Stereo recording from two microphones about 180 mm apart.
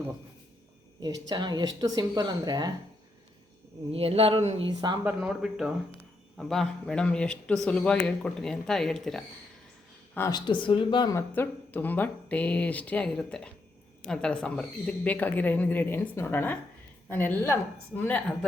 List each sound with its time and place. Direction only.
1.3 s speech: 25° right (ahead or behind)
3.9 s speech: 35° right (ahead or behind)
4.7 s speech: 25° right (ahead or behind)
5.0 s a man's voice: 5° right (ahead or behind)
10.2 s speech: 20° left (ahead or behind)
11.3 s speech: 10° left (ahead or behind)